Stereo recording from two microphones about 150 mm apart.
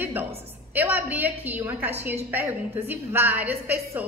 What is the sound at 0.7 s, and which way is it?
A woman's voice, 10° right (ahead or behind).